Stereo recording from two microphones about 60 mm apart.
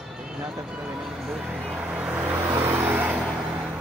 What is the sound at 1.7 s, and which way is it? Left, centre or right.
Vehicle, centre.